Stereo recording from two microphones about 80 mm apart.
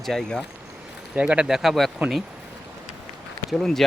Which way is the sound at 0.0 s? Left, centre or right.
Centre.